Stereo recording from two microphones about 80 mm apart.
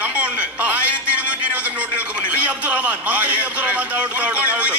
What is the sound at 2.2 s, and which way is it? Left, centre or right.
A man's voice, centre.